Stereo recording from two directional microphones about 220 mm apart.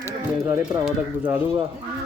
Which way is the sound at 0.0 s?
10° right (ahead or behind).